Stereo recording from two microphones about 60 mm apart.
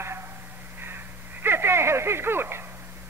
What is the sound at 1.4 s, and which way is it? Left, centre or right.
Speech, right.